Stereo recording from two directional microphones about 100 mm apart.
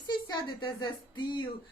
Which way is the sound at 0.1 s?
50° left (ahead or behind).